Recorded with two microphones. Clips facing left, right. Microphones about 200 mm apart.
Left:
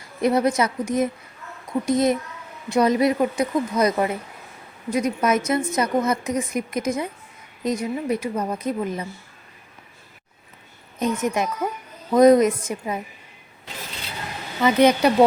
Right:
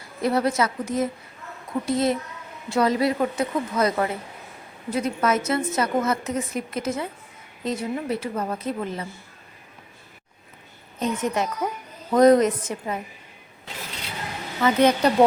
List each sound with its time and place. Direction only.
0.2 s a woman's voice: 20° left (ahead or behind)
11.0 s a woman's voice: 10° left (ahead or behind)
14.6 s a woman's voice: 15° left (ahead or behind)